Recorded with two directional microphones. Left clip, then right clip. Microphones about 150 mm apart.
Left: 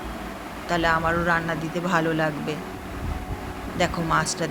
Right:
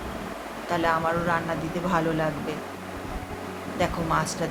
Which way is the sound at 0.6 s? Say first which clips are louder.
Left 2 dB; 20° left (ahead or behind).